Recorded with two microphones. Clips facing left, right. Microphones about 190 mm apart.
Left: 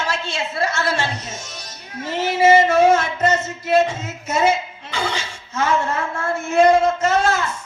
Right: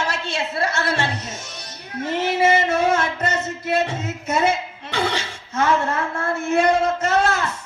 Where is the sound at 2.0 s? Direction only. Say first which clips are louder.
Right 1 dB; 60° right (ahead or behind).